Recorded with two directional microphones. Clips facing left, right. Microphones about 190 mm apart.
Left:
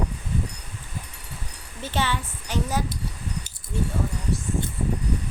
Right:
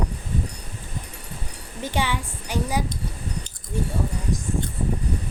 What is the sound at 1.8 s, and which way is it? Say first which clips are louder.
A child's voice: right 1 dB; 15° right (ahead or behind).